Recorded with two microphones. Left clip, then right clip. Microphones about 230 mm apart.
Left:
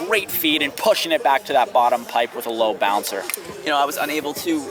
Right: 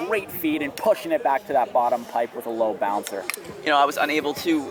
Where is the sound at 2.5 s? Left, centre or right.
Right.